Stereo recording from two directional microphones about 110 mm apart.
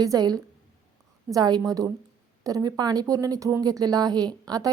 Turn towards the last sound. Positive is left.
turn(degrees=-35)  # may be behind; listen again after turning